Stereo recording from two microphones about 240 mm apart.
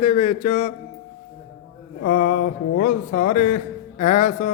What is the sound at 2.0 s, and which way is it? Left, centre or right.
A man's voice, left.